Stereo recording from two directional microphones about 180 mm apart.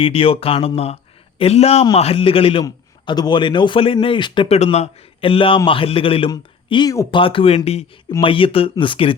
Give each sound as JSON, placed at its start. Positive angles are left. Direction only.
{"t": 0.0, "sound": "a man's voice", "side_deg": 30}